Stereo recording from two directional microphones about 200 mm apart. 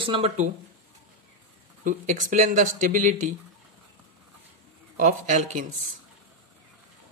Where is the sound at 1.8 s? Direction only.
40° right (ahead or behind).